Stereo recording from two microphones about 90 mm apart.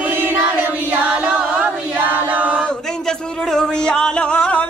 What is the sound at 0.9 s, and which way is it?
Chant, 20° right (ahead or behind).